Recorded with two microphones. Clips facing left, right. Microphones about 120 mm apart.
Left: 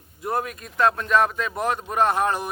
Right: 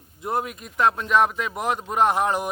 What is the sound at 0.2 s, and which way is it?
Speech, 20° right (ahead or behind).